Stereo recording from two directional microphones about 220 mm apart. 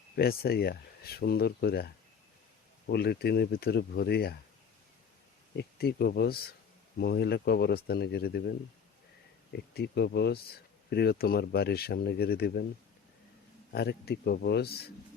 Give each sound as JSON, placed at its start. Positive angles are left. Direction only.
{"t": 0.2, "sound": "speech", "side_deg": 45}
{"t": 5.5, "sound": "speech", "side_deg": 45}
{"t": 13.7, "sound": "speech", "side_deg": 45}